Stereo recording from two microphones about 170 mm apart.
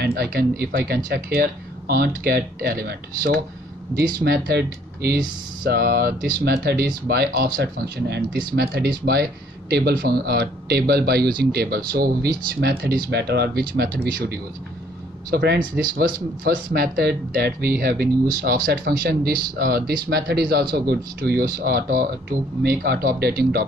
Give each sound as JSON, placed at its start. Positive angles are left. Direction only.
{"t": 0.0, "sound": "speech", "side_deg": -65}
{"t": 15.8, "sound": "speech", "side_deg": -60}